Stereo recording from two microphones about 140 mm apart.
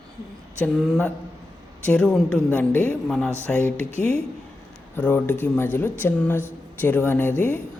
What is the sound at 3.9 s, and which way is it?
Speech, 50° right (ahead or behind).